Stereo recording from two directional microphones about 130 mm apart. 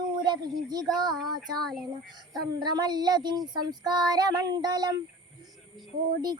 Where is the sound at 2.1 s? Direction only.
35° right (ahead or behind).